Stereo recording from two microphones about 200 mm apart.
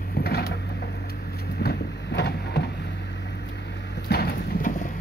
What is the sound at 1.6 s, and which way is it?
Vehicle, 55° left (ahead or behind).